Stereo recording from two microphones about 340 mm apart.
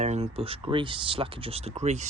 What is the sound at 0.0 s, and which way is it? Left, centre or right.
Speech, centre.